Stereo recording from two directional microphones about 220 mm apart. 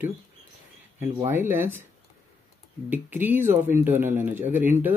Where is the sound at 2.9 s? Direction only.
10° right (ahead or behind).